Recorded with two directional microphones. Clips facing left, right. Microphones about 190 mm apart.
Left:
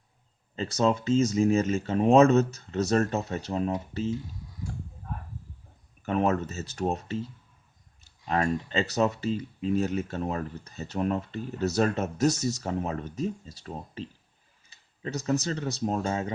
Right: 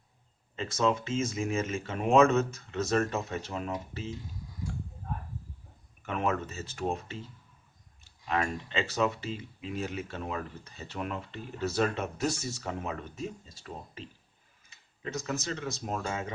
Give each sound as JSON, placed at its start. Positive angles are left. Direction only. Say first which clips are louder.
{"t": 0.5, "sound": "speech", "louder": "left 3 dB", "side_deg": 35}
{"t": 6.0, "sound": "speech", "louder": "left 5 dB", "side_deg": 35}